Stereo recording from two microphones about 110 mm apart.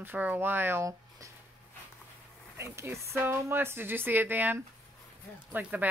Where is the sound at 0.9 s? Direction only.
30° right (ahead or behind).